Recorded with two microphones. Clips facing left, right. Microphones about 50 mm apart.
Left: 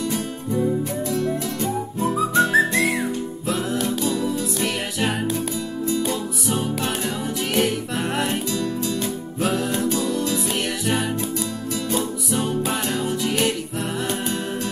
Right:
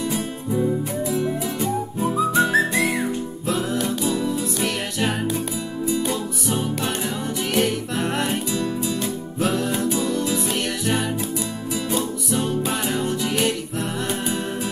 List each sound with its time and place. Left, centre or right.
1.0 s music: centre
1.6 s music: centre
9.4 s music: centre